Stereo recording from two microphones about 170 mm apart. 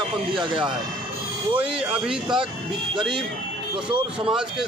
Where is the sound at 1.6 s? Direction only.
5° right (ahead or behind).